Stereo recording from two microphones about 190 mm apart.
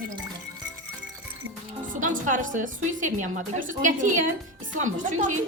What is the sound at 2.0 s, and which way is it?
A woman's voice, 45° right (ahead or behind).